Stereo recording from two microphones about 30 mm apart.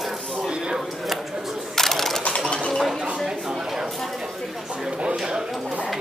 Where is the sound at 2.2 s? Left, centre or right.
Left.